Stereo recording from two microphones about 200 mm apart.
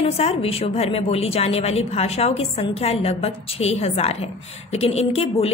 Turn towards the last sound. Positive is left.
turn(degrees=30)  # may be behind; listen again after turning